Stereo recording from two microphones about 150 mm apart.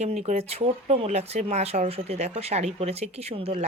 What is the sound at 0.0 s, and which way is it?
Speech, 45° right (ahead or behind).